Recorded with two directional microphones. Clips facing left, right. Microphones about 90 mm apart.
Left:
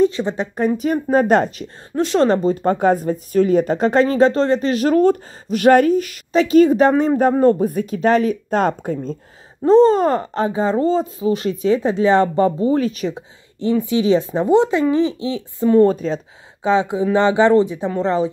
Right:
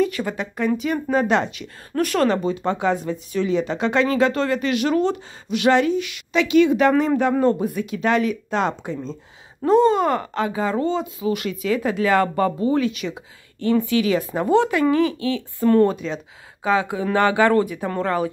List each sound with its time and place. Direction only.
0.0 s speech: 25° left (ahead or behind)
2.0 s speech: 25° left (ahead or behind)
2.2 s speech: 35° left (ahead or behind)
6.9 s speech: 25° left (ahead or behind)
7.2 s speech: 40° left (ahead or behind)
9.7 s speech: 30° left (ahead or behind)
13.6 s speech: 20° left (ahead or behind)
15.9 s speech: 35° left (ahead or behind)
16.6 s speech: 25° left (ahead or behind)